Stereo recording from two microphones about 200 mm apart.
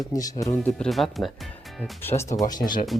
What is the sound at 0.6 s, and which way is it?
Speech, centre (ahead or behind).